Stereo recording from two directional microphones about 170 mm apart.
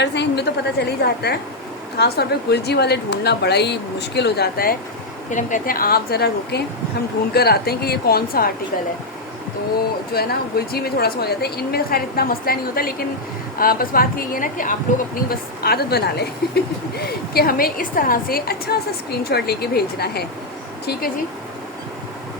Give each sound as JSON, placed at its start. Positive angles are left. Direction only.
{"t": 0.0, "sound": "a woman's voice", "side_deg": 90}
{"t": 10.1, "sound": "a woman's voice", "side_deg": 65}
{"t": 15.3, "sound": "a woman's voice", "side_deg": 65}